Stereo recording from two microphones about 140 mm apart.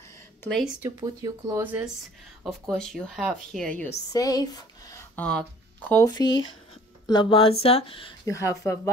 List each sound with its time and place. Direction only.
0.4 s speech: 5° left (ahead or behind)
0.8 s speech: 25° right (ahead or behind)
1.6 s speech: 15° right (ahead or behind)
2.7 s a woman's voice: centre (ahead or behind)
4.1 s speech: 25° left (ahead or behind)
5.1 s speech: 10° left (ahead or behind)
7.1 s speech: 35° left (ahead or behind)
8.3 s speech: 20° left (ahead or behind)